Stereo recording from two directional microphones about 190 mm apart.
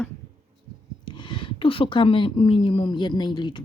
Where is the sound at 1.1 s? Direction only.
25° left (ahead or behind).